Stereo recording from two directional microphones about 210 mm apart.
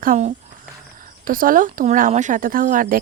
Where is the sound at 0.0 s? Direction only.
35° right (ahead or behind).